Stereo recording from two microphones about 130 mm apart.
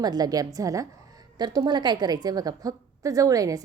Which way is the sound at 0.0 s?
30° right (ahead or behind).